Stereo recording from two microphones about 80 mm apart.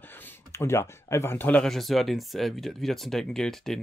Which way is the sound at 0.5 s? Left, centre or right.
Left.